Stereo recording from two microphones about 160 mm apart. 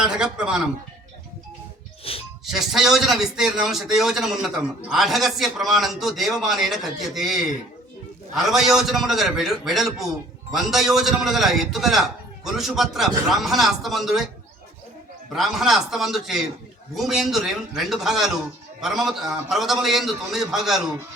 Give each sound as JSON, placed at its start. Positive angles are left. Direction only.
{"t": 0.0, "sound": "a man's voice", "side_deg": -5}
{"t": 2.1, "sound": "a sound", "side_deg": 35}
{"t": 2.4, "sound": "a man's voice", "side_deg": 0}
{"t": 15.3, "sound": "a man's voice", "side_deg": 0}